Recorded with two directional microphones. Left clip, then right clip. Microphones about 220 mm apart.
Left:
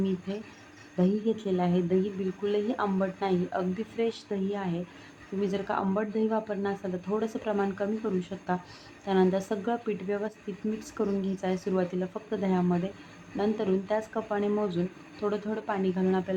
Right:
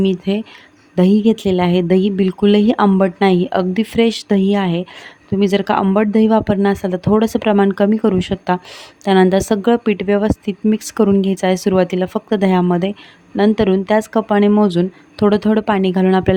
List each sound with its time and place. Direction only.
0.9 s a woman's voice: 50° right (ahead or behind)